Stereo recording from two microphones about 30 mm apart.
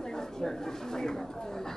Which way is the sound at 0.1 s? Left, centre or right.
Centre.